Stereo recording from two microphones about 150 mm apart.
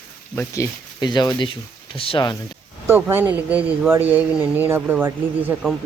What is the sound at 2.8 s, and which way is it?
Speech, 15° right (ahead or behind).